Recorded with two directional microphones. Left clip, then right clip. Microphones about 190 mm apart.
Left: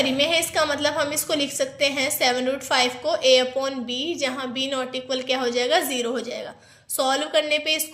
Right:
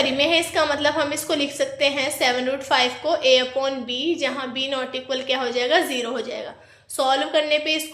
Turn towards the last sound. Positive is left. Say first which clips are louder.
# right 1 dB
turn(degrees=30)  # may be behind; listen again after turning